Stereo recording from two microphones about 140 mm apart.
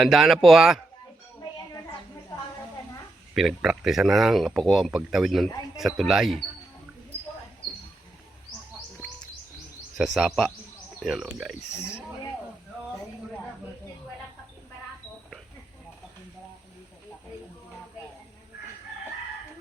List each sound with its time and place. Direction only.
0.0 s speech: centre (ahead or behind)
1.7 s a sound: 25° left (ahead or behind)
3.3 s speech: centre (ahead or behind)
10.0 s speech: centre (ahead or behind)
11.7 s speech: 20° left (ahead or behind)